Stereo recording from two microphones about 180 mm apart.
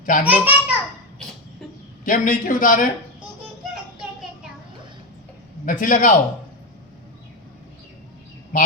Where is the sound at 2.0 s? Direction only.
50° left (ahead or behind).